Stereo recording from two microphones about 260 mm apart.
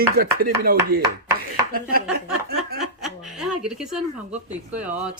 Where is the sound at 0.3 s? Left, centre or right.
Right.